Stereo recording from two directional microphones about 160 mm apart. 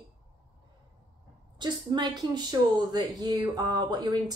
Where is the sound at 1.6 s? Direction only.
25° right (ahead or behind).